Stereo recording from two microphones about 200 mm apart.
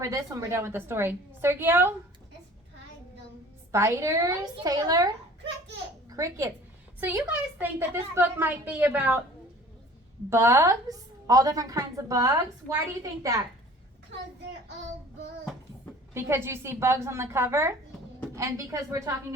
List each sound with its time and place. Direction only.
0.0 s a woman's voice: 15° right (ahead or behind)
3.7 s a woman's voice: 15° right (ahead or behind)
10.2 s a woman's voice: 15° right (ahead or behind)
16.1 s a woman's voice: 10° right (ahead or behind)